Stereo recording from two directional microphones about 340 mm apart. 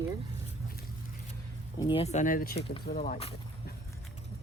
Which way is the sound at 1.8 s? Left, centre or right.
Centre.